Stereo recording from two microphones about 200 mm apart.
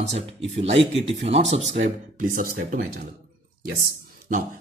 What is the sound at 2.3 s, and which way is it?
Speech, 45° right (ahead or behind).